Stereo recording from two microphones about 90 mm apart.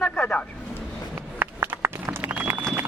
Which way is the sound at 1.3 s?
25° right (ahead or behind).